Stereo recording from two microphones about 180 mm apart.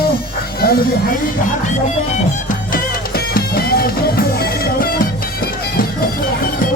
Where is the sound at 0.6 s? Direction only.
60° left (ahead or behind).